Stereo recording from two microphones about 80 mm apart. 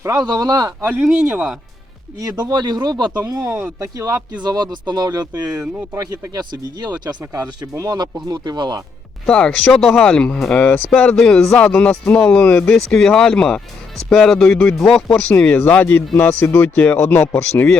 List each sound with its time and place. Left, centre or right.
0.0 s speech: right
1.0 s speech: centre
2.1 s speech: right
3.2 s speech: right
4.4 s speech: right
5.5 s speech: right
6.3 s speech: right
9.2 s speech: centre; by 17.7 s left